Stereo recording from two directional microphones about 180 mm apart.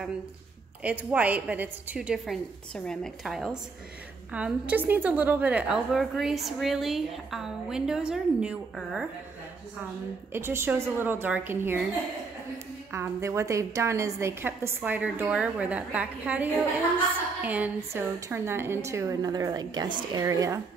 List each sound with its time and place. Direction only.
0.8 s a woman's voice: 10° right (ahead or behind)
10.3 s a woman's voice: 15° right (ahead or behind)
12.9 s a woman's voice: 15° right (ahead or behind)